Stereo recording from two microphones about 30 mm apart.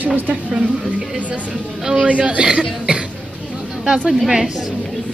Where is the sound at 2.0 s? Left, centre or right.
Right.